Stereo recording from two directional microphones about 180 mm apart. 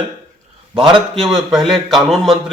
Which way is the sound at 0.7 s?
25° right (ahead or behind).